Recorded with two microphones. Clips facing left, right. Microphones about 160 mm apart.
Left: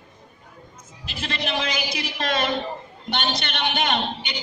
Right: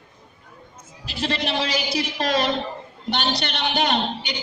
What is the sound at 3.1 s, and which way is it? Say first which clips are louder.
A man's voice: right 1 dB; 35° right (ahead or behind).